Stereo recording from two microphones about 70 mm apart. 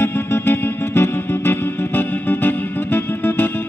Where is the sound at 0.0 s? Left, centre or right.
Left.